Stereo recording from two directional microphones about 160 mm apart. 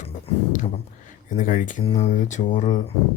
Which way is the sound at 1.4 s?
55° left (ahead or behind).